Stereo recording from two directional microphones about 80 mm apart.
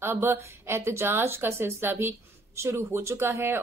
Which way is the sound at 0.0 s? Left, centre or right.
Right.